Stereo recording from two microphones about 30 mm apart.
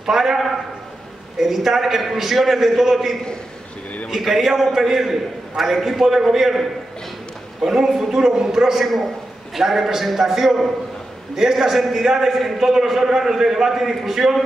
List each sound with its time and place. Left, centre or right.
0.0 s a man's voice: centre
1.4 s a man's voice: centre
7.6 s a man's voice: right
8.2 s a man's voice: right
8.8 s a man's voice: centre
9.6 s a man's voice: centre